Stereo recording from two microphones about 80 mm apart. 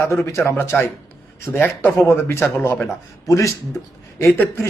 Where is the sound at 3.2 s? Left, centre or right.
Left.